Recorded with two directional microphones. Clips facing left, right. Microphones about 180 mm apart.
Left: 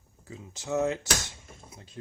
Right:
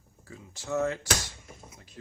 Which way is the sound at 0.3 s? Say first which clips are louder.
Left 1 dB; 20° left (ahead or behind).